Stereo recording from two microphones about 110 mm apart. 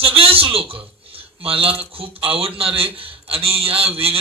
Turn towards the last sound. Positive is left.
turn(degrees=-60)  # may be behind; listen again after turning